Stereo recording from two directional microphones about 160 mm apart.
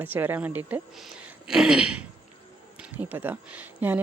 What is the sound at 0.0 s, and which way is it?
Speech, 10° right (ahead or behind).